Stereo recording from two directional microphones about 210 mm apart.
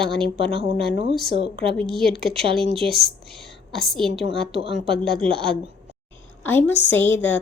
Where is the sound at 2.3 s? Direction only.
30° right (ahead or behind).